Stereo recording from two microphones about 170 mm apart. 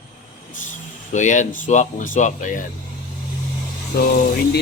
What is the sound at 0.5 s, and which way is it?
Speech, 50° left (ahead or behind).